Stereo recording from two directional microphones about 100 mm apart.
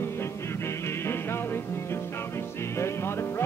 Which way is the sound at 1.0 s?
25° left (ahead or behind).